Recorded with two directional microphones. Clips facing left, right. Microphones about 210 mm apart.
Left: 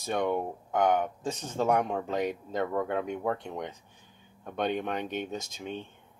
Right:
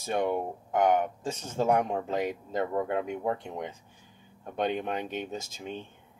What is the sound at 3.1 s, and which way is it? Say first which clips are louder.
Speech: even; 10° right (ahead or behind).